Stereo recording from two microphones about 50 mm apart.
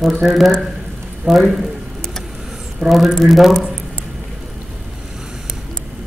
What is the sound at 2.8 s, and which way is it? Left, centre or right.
Speech, centre.